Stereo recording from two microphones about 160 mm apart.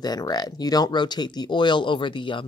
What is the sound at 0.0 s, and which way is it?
Speech, 25° left (ahead or behind).